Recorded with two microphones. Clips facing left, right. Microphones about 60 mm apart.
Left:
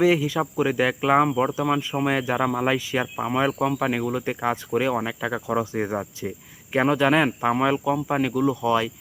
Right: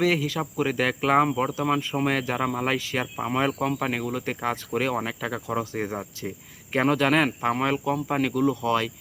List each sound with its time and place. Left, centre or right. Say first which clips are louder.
0.0 s speech: left 4 dB; centre
0.7 s cricket: left 1 dB; centre
1.2 s speech: left 2 dB; centre
1.6 s cricket: left 1 dB; centre
2.4 s speech: left 3 dB; centre
2.7 s cricket: left 3 dB; centre
3.2 s speech: left 2 dB; centre
3.9 s cricket: left 3 dB; centre